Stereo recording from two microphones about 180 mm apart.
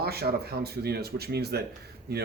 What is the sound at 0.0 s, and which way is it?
Speech, 60° right (ahead or behind).